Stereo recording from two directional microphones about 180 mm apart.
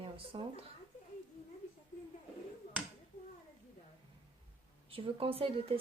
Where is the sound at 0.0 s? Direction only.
30° right (ahead or behind).